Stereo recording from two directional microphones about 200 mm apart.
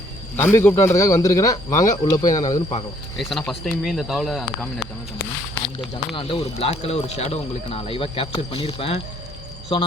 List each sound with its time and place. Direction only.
0.3 s a man's voice: 10° left (ahead or behind)
3.2 s speech: centre (ahead or behind)
6.1 s speech: 25° left (ahead or behind)